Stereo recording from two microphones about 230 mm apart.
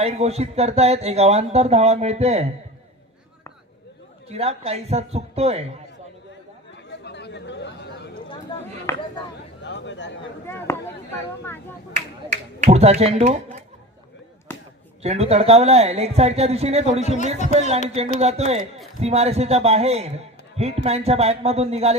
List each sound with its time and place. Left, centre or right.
0.0 s speech: right
4.3 s speech: right
7.0 s chatter: left
8.5 s a sound: centre
9.6 s a sound: left
10.4 s speech: centre
12.3 s speech: right
14.5 s basketball bounce: centre
15.0 s speech: right